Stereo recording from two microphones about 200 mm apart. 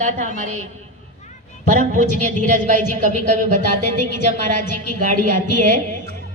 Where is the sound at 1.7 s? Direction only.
40° right (ahead or behind).